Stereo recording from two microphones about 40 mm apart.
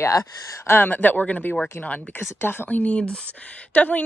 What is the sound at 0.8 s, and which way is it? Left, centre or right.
Speech, left.